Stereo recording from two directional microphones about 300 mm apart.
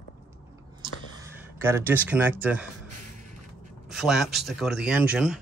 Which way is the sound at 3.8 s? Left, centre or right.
Centre.